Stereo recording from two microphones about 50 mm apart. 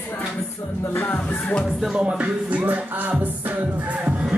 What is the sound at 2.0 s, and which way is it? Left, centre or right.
Music, right.